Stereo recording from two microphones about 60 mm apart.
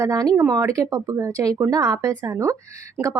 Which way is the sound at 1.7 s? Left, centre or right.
Right.